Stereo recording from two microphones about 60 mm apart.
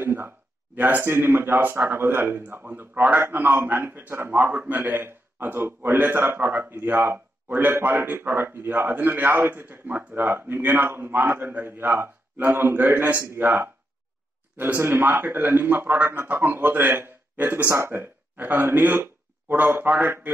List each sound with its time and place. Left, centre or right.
0.0 s a man's voice: right
2.9 s a man's voice: right
3.2 s a man's voice: right